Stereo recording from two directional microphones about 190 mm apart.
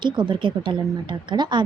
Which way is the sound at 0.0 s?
25° right (ahead or behind).